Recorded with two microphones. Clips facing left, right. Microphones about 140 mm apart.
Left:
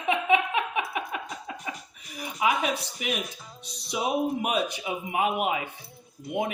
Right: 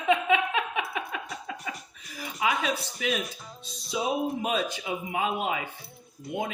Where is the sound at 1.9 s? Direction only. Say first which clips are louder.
Left 2 dB; 20° left (ahead or behind).